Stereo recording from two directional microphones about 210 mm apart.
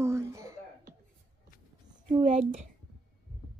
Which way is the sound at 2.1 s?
30° right (ahead or behind).